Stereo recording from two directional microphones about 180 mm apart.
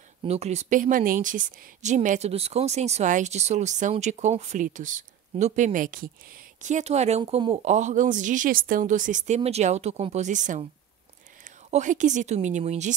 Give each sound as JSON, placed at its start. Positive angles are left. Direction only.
{"t": 0.2, "sound": "a woman's voice", "side_deg": -35}
{"t": 6.6, "sound": "a woman's voice", "side_deg": -40}
{"t": 11.7, "sound": "speech", "side_deg": -45}